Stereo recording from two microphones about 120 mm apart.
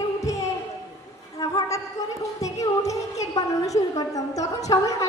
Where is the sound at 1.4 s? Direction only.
30° left (ahead or behind).